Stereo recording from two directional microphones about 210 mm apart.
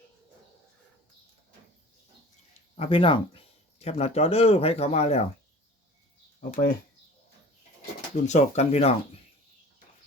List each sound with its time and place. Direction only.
2.7 s speech: 25° left (ahead or behind)
8.1 s speech: 35° left (ahead or behind)